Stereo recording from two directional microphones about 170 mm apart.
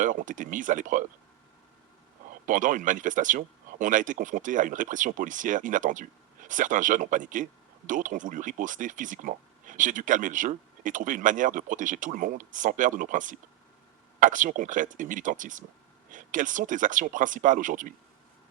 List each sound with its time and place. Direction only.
0.0 s speech: 50° right (ahead or behind)
2.5 s speech: 50° right (ahead or behind)